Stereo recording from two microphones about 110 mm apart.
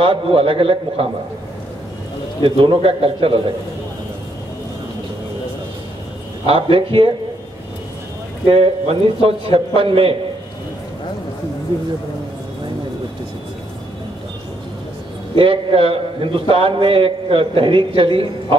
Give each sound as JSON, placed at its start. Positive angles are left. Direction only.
{"t": 0.0, "sound": "a man's voice", "side_deg": -55}
{"t": 2.4, "sound": "a man's voice", "side_deg": -55}
{"t": 6.4, "sound": "a man's voice", "side_deg": -55}
{"t": 8.5, "sound": "a man's voice", "side_deg": -60}
{"t": 15.3, "sound": "a man's voice", "side_deg": -55}